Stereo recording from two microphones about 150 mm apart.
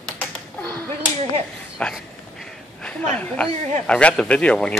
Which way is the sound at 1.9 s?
5° left (ahead or behind).